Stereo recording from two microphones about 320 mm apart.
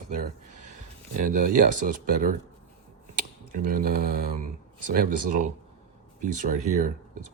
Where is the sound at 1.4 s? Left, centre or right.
Right.